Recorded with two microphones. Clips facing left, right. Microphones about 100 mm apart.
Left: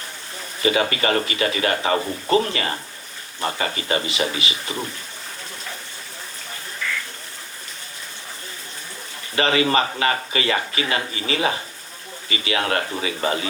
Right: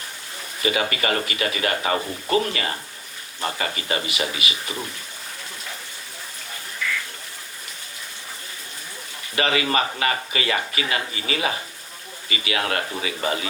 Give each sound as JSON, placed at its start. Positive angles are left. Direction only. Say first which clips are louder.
{"t": 0.6, "sound": "speech", "louder": "left 3 dB", "side_deg": 30}
{"t": 6.8, "sound": "duck", "louder": "right 1 dB", "side_deg": 35}
{"t": 9.3, "sound": "speech", "louder": "left 3 dB", "side_deg": 30}